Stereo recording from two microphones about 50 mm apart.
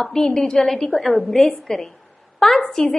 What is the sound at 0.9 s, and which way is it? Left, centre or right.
A woman's voice, centre.